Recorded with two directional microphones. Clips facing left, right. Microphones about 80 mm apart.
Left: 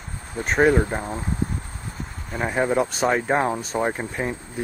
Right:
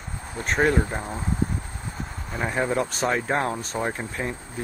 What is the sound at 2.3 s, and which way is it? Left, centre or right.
Speech, centre.